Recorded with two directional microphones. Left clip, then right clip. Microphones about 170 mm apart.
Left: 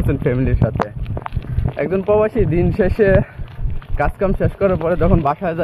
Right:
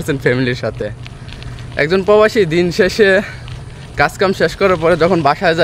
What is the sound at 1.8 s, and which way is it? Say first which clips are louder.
Speech: right 5 dB; 35° right (ahead or behind).